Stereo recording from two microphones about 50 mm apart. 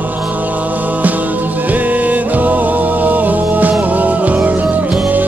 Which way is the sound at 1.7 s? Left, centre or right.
Right.